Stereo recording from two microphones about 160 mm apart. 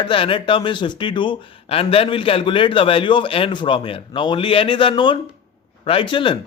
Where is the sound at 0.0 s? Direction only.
35° left (ahead or behind).